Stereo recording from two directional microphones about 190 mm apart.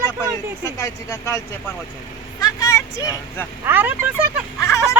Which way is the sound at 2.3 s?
15° left (ahead or behind).